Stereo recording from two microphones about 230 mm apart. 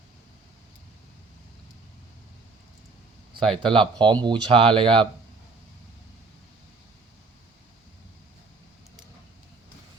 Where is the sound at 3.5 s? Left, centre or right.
Right.